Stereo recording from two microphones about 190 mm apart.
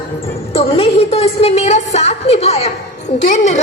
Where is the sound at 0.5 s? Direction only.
30° left (ahead or behind).